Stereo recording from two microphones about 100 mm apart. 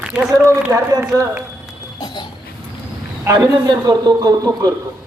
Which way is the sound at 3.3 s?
45° right (ahead or behind).